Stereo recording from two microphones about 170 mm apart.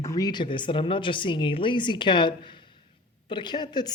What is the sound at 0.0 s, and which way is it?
Speech, 20° left (ahead or behind).